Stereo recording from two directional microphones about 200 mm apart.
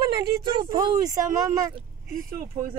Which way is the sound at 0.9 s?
40° right (ahead or behind).